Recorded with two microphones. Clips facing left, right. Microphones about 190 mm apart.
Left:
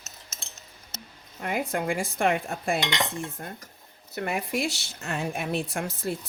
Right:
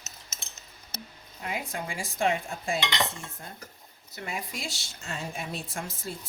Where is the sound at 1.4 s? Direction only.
55° left (ahead or behind).